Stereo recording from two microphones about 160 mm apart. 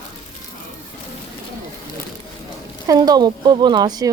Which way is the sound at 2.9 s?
25° right (ahead or behind).